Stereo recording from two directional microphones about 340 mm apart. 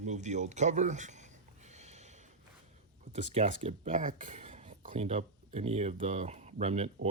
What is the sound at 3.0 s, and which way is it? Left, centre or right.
Speech, right.